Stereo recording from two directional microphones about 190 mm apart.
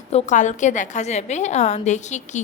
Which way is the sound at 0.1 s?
35° left (ahead or behind).